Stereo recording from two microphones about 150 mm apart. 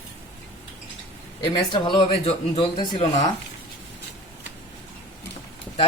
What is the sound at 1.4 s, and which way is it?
A man's voice, 30° left (ahead or behind).